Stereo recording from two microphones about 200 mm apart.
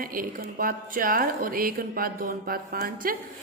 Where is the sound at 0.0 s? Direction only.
45° right (ahead or behind).